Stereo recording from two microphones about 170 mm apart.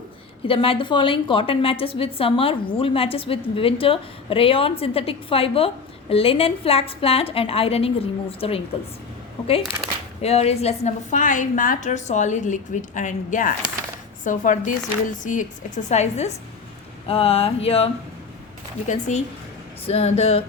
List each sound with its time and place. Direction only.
0.4 s a woman's voice: 30° left (ahead or behind)
10.2 s a woman's voice: 40° left (ahead or behind)
18.9 s a woman's voice: 45° left (ahead or behind)